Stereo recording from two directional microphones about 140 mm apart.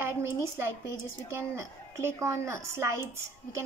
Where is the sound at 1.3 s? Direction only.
20° right (ahead or behind).